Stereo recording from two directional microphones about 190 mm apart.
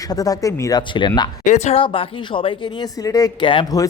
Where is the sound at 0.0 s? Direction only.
20° left (ahead or behind).